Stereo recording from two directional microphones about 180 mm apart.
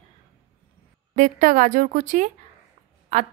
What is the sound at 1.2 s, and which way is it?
A woman's voice, 45° right (ahead or behind).